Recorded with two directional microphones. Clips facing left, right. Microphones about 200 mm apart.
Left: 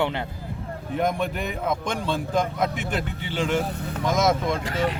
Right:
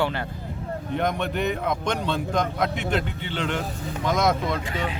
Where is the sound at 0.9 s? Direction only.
5° left (ahead or behind).